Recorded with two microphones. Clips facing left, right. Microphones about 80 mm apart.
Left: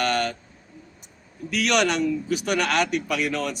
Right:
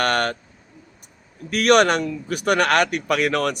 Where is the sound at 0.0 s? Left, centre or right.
Right.